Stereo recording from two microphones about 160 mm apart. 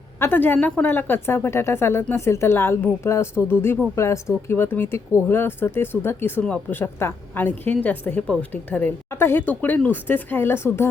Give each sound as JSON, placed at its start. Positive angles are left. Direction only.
{"t": 0.2, "sound": "speech", "side_deg": 10}